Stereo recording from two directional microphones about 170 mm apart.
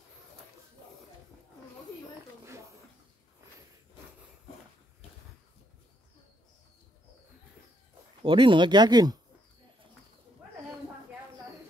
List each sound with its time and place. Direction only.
8.2 s speech: 30° right (ahead or behind)